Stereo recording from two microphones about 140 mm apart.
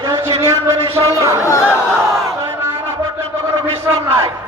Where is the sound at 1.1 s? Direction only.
20° right (ahead or behind).